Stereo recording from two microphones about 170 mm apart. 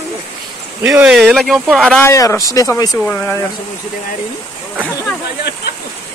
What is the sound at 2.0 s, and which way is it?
Speech, 15° left (ahead or behind).